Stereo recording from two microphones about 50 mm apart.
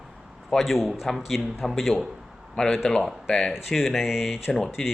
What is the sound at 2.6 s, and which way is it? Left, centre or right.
Speech, centre.